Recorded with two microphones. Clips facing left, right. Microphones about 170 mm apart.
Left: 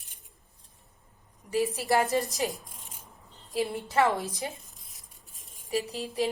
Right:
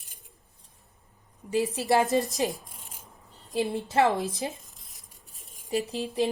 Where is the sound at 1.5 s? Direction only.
25° right (ahead or behind).